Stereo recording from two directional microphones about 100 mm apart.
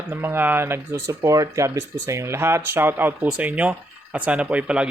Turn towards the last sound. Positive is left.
turn(degrees=-10)  # may be behind; listen again after turning